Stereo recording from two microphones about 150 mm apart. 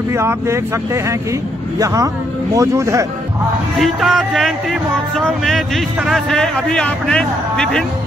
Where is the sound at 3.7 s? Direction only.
Centre (ahead or behind).